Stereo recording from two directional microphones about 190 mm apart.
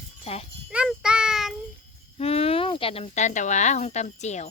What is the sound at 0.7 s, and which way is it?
Child singing, 5° right (ahead or behind).